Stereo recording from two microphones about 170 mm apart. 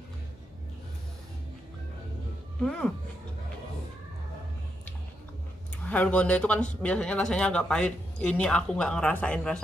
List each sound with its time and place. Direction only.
2.6 s speech: 5° left (ahead or behind)
5.9 s speech: 10° left (ahead or behind)